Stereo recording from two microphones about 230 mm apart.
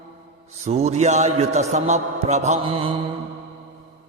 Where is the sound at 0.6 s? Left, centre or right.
Right.